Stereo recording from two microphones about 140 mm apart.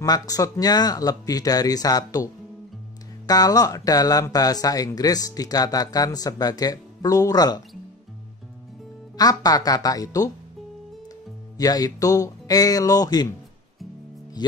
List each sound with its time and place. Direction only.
0.0 s speech: 25° left (ahead or behind)
3.3 s speech: 25° left (ahead or behind)
9.1 s speech: 25° left (ahead or behind)
11.5 s speech: 25° left (ahead or behind)